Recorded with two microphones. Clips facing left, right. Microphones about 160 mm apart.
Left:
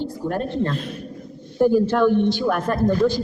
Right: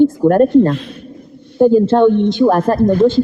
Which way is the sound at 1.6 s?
25° right (ahead or behind).